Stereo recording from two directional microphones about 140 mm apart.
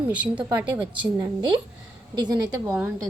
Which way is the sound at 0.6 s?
35° right (ahead or behind).